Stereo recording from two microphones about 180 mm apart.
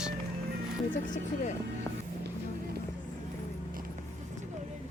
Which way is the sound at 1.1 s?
45° left (ahead or behind).